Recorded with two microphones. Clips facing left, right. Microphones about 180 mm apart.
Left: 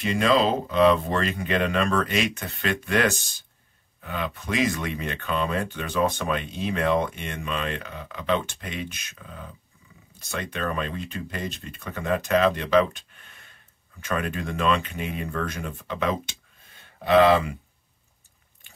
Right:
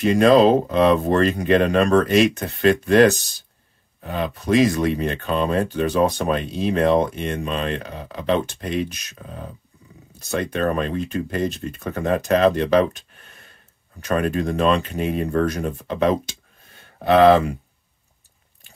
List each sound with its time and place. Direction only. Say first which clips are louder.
0.0 s speech: right 8 dB; 45° right (ahead or behind)